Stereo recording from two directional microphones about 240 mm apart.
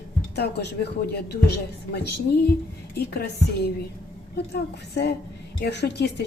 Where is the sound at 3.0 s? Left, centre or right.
Left.